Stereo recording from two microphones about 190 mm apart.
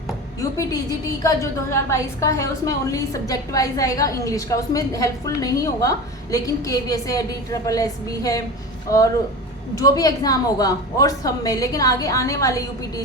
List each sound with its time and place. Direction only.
0.6 s a woman's voice: 20° left (ahead or behind)
9.7 s a woman's voice: 20° left (ahead or behind)